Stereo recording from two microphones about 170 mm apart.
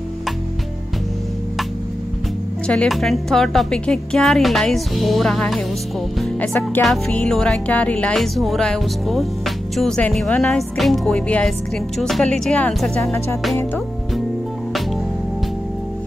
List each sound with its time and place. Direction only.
2.6 s a woman's voice: 5° left (ahead or behind)
13.0 s music: 15° left (ahead or behind)